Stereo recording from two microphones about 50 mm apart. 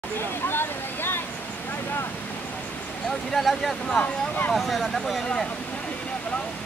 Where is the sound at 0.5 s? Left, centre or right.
Left.